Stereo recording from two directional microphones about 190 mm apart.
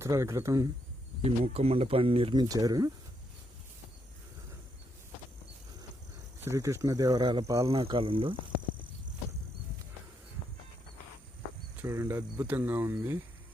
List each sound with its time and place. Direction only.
0.0 s speech: 15° right (ahead or behind)
1.2 s speech: 30° right (ahead or behind)
6.4 s speech: 15° right (ahead or behind)
7.7 s speech: 30° right (ahead or behind)
11.8 s speech: 10° right (ahead or behind)